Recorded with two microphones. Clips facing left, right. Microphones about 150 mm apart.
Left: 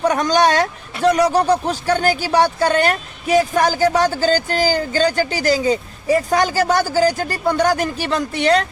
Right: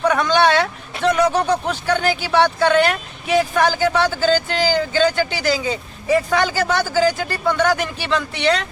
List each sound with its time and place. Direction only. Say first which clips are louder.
0.1 s speech: even; 40° left (ahead or behind)